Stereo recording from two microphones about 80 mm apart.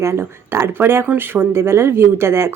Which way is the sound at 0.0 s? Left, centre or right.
Right.